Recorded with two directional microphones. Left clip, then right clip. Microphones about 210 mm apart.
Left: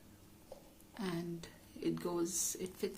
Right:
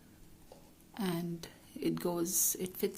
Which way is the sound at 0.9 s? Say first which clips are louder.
Right 4 dB; 45° right (ahead or behind).